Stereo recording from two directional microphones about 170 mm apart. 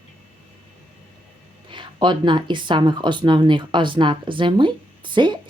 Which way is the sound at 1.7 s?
30° right (ahead or behind).